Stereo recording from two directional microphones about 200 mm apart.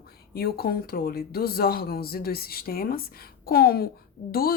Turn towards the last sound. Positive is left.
turn(degrees=50)  # may be behind; listen again after turning